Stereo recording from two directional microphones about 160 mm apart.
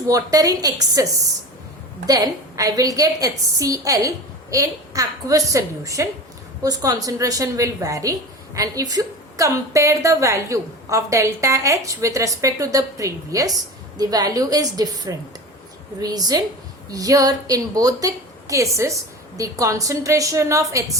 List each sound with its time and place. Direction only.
0.1 s a woman's voice: 20° right (ahead or behind)